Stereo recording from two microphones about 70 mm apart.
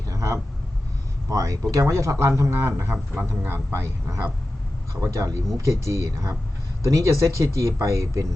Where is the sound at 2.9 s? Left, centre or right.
Centre.